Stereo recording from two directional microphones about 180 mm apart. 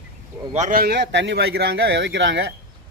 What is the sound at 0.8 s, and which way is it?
Speech, 65° right (ahead or behind).